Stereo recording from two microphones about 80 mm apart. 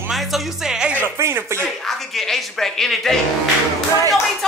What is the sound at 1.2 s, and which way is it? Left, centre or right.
Speech, right.